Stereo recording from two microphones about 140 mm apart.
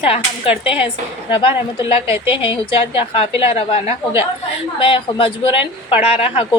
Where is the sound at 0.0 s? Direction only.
40° left (ahead or behind).